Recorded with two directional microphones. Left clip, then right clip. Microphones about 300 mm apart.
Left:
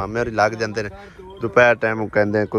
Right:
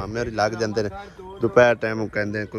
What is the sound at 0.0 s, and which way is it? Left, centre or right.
Speech, centre.